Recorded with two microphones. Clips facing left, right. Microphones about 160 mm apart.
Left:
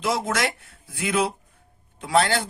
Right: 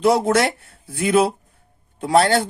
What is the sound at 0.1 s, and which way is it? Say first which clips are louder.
Speech: right 4 dB; 35° right (ahead or behind).